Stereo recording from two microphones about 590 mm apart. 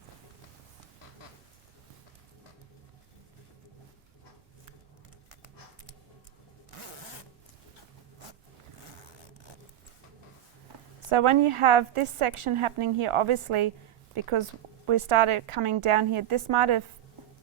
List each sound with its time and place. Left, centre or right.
11.1 s a woman's voice: right